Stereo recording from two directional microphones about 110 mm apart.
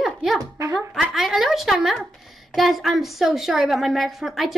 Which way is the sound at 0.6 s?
30° right (ahead or behind).